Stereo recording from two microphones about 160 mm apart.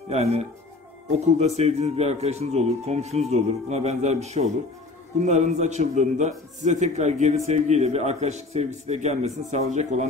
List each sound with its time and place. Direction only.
0.1 s a man's voice: 40° right (ahead or behind)